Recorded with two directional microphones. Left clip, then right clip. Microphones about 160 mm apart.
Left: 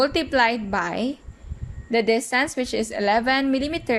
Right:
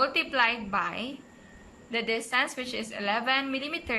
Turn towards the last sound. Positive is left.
turn(degrees=40)  # may be behind; listen again after turning